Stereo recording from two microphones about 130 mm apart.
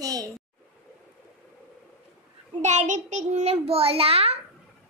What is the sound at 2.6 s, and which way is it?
A child's voice, 65° right (ahead or behind).